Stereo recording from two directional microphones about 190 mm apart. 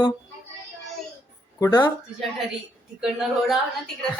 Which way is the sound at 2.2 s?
Centre (ahead or behind).